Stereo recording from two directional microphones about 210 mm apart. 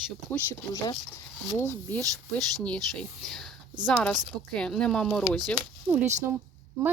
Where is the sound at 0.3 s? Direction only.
10° left (ahead or behind).